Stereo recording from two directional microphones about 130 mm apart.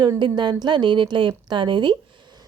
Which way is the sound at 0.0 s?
35° right (ahead or behind).